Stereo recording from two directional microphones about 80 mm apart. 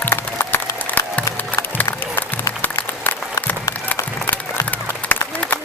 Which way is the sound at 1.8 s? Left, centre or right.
Left.